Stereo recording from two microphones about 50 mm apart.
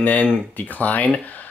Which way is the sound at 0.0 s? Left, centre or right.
Left.